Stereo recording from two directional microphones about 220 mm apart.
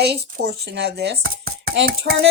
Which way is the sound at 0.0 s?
50° right (ahead or behind).